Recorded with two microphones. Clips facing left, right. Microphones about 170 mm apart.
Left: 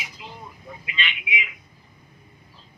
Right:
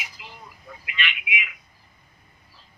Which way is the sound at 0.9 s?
25° left (ahead or behind).